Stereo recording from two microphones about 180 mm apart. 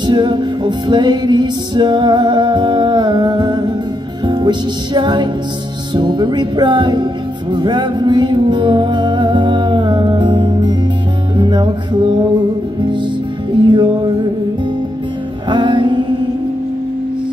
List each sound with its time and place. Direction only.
0.0 s music: 25° right (ahead or behind)
13.6 s music: 25° right (ahead or behind)
15.5 s music: 25° right (ahead or behind)